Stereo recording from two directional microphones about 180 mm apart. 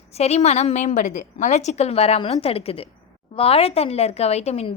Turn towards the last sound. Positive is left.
turn(degrees=35)  # may be behind; listen again after turning